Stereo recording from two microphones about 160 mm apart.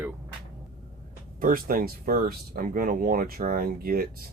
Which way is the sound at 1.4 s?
65° right (ahead or behind).